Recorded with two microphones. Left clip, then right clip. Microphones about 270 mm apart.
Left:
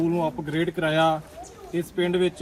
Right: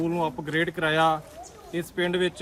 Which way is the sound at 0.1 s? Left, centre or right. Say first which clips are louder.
Left 1 dB; centre.